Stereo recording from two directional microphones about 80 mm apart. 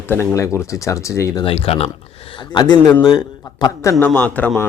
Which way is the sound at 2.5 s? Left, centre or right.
Left.